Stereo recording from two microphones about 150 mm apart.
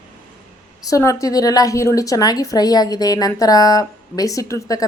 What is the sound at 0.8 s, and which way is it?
A woman's voice, 20° left (ahead or behind).